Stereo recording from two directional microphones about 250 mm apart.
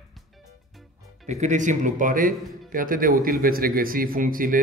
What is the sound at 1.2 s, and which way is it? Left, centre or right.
Speech, right.